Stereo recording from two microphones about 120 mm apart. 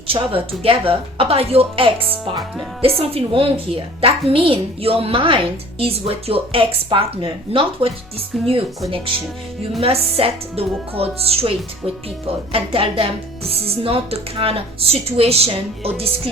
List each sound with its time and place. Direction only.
0.1 s a woman's voice: 50° right (ahead or behind)
9.8 s a woman's voice: 55° right (ahead or behind)